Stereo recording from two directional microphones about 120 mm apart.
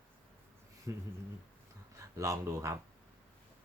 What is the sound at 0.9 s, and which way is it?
Speech, 25° right (ahead or behind).